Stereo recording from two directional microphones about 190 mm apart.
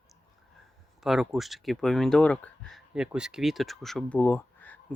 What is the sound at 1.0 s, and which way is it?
Speech, centre (ahead or behind).